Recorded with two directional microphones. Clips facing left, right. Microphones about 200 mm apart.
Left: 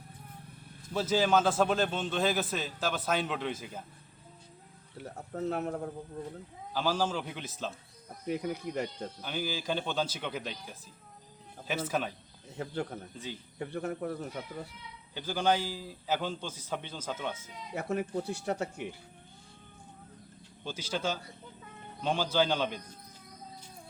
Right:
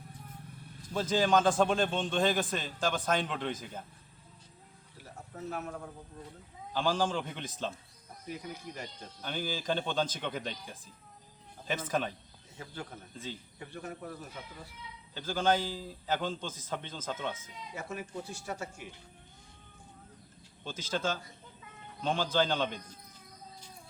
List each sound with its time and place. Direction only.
0.9 s a man's voice: 5° left (ahead or behind)
4.9 s music: 60° left (ahead or behind)
5.5 s speech: 40° left (ahead or behind)
6.7 s a man's voice: 5° left (ahead or behind)
8.3 s speech: 60° left (ahead or behind)
9.2 s a man's voice: 5° left (ahead or behind)
11.9 s a man's voice: 10° left (ahead or behind)
12.5 s speech: 60° left (ahead or behind)
15.1 s a man's voice: 15° left (ahead or behind)
17.7 s speech: 60° left (ahead or behind)
20.7 s a man's voice: 10° left (ahead or behind)